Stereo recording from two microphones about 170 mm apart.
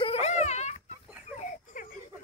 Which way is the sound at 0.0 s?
40° left (ahead or behind).